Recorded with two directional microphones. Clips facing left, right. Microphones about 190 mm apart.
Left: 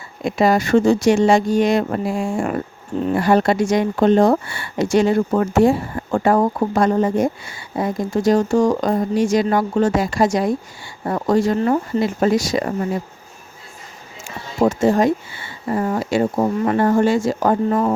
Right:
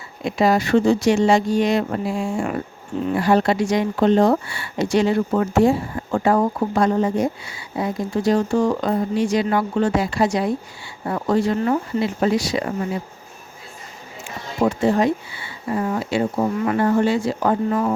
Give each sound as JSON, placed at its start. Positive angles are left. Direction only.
{"t": 0.3, "sound": "speech", "side_deg": 50}
{"t": 14.6, "sound": "speech", "side_deg": 45}